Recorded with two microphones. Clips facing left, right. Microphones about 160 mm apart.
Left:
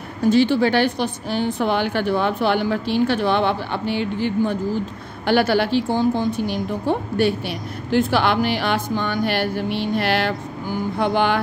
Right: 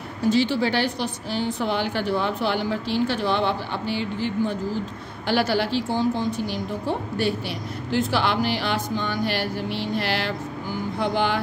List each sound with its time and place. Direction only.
0.3 s a woman's voice: 55° left (ahead or behind)